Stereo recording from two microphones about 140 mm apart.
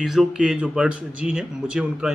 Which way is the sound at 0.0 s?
Centre (ahead or behind).